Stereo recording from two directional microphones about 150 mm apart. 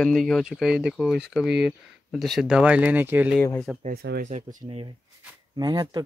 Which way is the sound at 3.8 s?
90° right.